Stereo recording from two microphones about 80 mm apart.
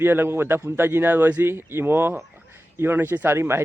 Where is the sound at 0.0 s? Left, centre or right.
Right.